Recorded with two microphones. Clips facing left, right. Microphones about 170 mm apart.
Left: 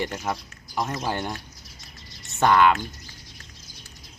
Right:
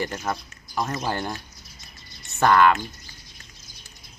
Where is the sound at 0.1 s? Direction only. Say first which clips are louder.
Even; centre (ahead or behind).